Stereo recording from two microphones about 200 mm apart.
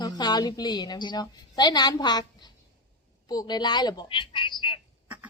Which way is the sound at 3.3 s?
20° left (ahead or behind).